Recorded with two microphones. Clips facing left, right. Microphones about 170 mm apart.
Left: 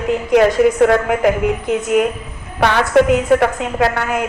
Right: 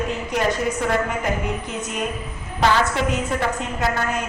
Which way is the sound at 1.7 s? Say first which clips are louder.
Left 13 dB; 90° left.